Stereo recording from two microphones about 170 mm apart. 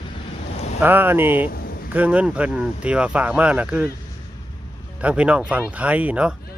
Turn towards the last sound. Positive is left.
turn(degrees=-5)  # may be behind; listen again after turning